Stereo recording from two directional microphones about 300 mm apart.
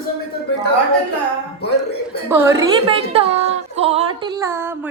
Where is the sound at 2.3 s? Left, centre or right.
Centre.